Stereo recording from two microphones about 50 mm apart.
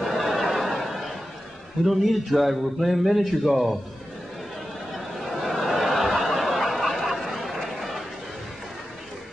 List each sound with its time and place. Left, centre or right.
0.0 s neigh: centre
1.9 s a man's voice: centre
4.9 s snicker: centre